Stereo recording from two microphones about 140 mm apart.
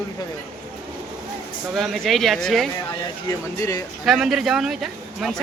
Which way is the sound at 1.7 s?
Centre (ahead or behind).